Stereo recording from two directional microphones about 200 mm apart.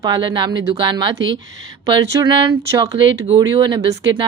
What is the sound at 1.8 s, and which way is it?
Speech, 20° right (ahead or behind).